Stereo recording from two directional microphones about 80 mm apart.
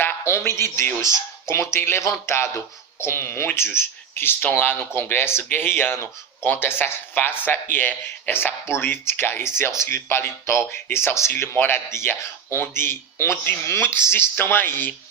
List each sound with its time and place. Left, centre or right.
0.3 s speech: left